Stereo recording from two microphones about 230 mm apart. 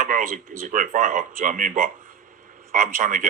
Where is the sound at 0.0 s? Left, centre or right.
Right.